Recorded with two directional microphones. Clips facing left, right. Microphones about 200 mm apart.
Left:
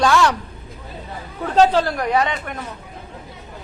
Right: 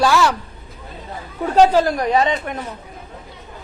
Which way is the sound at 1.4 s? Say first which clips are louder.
Right 2 dB; 10° right (ahead or behind).